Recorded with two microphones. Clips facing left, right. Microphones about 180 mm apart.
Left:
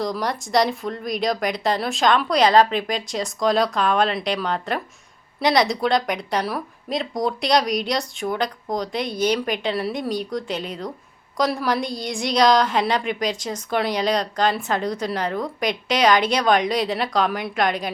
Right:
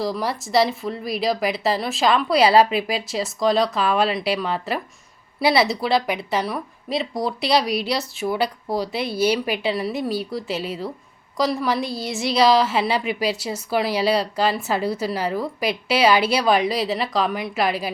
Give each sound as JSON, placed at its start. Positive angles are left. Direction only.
{"t": 0.0, "sound": "a woman's voice", "side_deg": -5}